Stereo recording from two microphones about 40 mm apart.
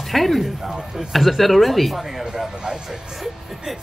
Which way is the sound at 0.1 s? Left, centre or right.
Centre.